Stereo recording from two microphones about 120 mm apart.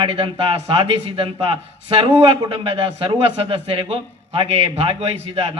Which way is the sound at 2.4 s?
40° right (ahead or behind).